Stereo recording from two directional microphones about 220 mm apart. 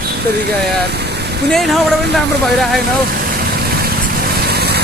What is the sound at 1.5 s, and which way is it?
Speech, centre (ahead or behind).